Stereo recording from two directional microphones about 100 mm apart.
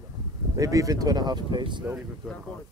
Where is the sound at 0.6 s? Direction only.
35° right (ahead or behind); by 1.9 s 50° right (ahead or behind).